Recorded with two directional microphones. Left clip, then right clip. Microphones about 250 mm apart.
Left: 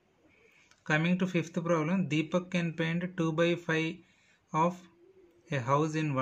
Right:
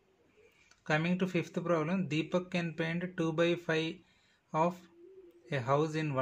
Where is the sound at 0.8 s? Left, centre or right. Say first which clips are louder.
Left 2 dB; centre.